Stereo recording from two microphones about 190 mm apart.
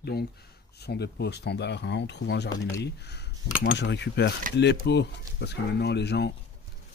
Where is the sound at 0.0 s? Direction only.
55° left (ahead or behind).